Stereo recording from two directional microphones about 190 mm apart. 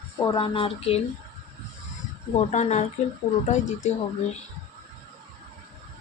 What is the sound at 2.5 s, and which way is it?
Speech, 40° left (ahead or behind).